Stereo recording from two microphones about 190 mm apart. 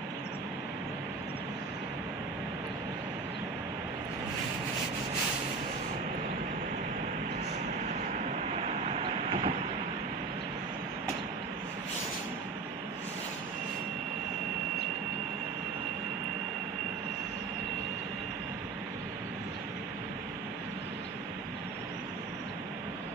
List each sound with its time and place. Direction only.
8.6 s vehicle: 30° right (ahead or behind)